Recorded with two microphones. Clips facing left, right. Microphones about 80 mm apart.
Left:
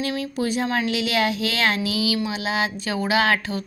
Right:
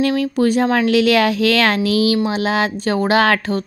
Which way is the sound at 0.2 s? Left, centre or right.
Right.